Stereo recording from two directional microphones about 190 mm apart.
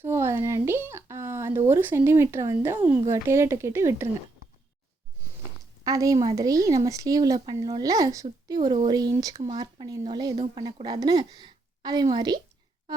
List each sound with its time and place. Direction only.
0.0 s a sound: 15° right (ahead or behind)
3.1 s speech: 15° right (ahead or behind)
5.8 s speech: 15° right (ahead or behind)